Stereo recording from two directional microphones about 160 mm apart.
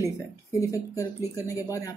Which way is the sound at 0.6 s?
20° left (ahead or behind).